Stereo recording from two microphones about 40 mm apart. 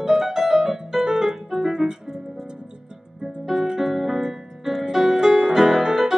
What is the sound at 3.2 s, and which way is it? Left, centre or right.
Keyboard, centre.